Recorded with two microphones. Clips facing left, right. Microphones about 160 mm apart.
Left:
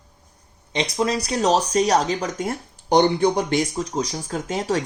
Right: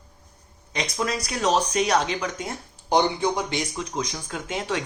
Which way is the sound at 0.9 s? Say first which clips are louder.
Left 6 dB; 30° left (ahead or behind).